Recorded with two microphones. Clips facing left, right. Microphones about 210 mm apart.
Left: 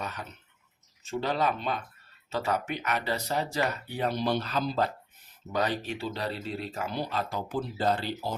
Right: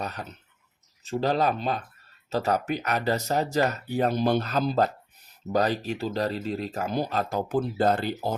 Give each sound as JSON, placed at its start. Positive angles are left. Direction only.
{"t": 0.0, "sound": "speech", "side_deg": -35}
{"t": 5.5, "sound": "speech", "side_deg": -40}